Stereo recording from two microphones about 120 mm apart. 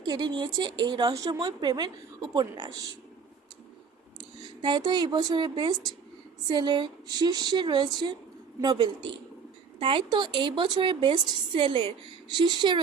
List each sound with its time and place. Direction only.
0.0 s a woman's voice: 35° right (ahead or behind)
4.2 s a woman's voice: 40° right (ahead or behind)